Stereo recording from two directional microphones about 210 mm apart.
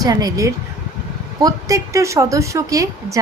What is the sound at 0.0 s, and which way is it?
A woman's voice, 15° right (ahead or behind).